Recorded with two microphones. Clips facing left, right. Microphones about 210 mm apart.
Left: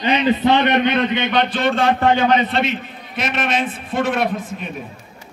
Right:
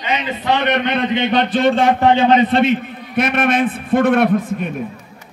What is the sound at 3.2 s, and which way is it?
A man's voice, 55° right (ahead or behind).